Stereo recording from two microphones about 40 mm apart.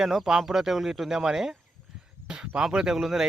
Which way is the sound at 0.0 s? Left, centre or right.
Centre.